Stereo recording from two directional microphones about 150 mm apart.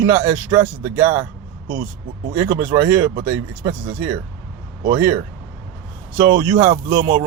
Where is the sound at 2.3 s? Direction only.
20° right (ahead or behind).